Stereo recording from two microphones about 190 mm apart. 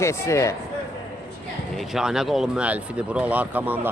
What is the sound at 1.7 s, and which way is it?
Speech, centre (ahead or behind).